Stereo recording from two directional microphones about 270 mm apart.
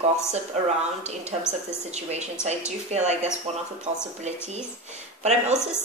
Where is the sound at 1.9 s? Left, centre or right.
Right.